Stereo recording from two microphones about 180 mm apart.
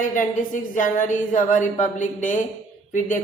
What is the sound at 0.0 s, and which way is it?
A woman's voice, 45° left (ahead or behind).